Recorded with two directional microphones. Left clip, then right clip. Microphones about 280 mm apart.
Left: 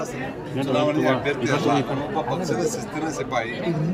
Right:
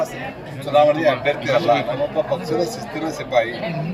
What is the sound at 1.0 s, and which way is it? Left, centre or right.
A man's voice, centre.